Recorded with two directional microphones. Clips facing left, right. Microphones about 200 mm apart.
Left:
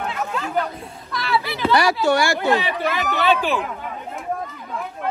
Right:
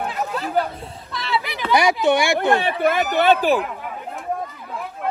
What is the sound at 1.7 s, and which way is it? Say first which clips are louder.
Speech: right 1 dB; 15° right (ahead or behind).